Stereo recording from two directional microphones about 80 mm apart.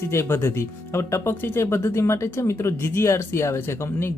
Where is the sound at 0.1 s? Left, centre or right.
Left.